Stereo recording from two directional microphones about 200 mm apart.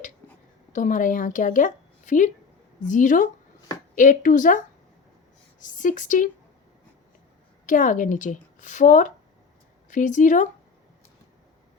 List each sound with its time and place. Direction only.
0.7 s a woman's voice: 40° left (ahead or behind)
7.7 s a woman's voice: 40° left (ahead or behind)